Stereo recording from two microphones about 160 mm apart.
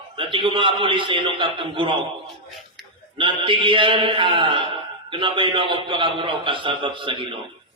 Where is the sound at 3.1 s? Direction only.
30° right (ahead or behind).